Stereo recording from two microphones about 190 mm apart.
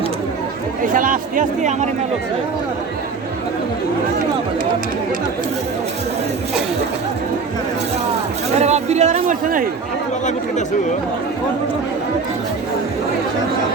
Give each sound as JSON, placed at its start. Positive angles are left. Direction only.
{"t": 0.9, "sound": "speech", "side_deg": -45}
{"t": 8.5, "sound": "speech", "side_deg": -35}